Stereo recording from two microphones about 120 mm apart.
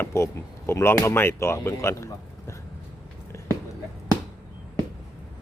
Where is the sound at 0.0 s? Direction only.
25° left (ahead or behind).